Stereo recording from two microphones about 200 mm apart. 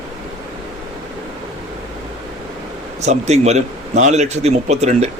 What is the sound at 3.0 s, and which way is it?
Speech, 35° right (ahead or behind).